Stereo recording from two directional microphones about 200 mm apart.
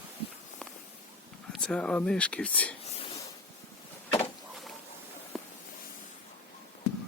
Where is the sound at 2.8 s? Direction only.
30° left (ahead or behind).